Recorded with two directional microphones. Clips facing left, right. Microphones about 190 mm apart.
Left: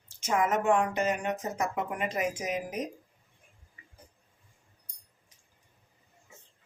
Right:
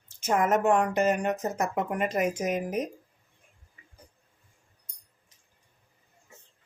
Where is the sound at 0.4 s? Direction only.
45° right (ahead or behind).